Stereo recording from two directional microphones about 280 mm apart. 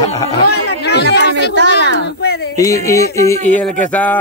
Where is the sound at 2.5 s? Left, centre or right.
Centre.